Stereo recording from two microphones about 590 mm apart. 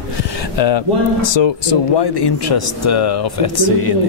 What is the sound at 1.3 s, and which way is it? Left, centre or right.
Speech, left.